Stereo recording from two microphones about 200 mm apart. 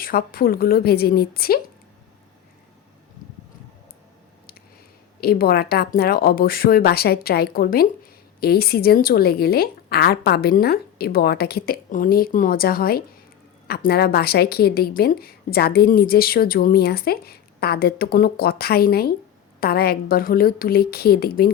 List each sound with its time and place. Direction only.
0.0 s a woman's voice: 45° left (ahead or behind)
5.2 s a woman's voice: 50° left (ahead or behind)